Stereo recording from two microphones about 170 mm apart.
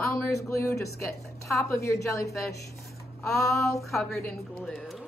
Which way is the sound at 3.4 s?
20° left (ahead or behind).